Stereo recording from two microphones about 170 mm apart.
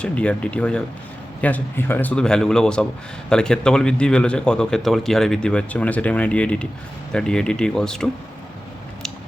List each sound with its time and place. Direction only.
0.0 s a man's voice: 5° left (ahead or behind)